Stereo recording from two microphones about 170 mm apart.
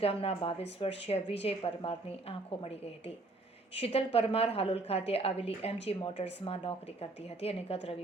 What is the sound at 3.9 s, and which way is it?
A woman's voice, 35° left (ahead or behind).